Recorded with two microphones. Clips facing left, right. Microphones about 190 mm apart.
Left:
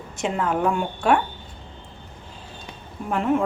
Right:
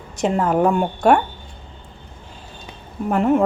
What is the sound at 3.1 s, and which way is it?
Speech, 45° right (ahead or behind).